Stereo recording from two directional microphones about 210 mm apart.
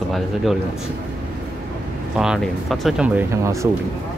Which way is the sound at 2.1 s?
5° right (ahead or behind).